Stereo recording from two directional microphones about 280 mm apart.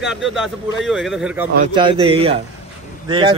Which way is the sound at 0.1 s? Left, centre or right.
Centre.